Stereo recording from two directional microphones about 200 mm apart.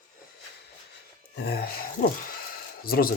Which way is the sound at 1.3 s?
50° left (ahead or behind).